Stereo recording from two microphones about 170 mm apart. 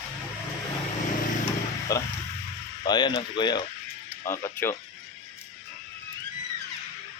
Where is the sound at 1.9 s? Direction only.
20° left (ahead or behind).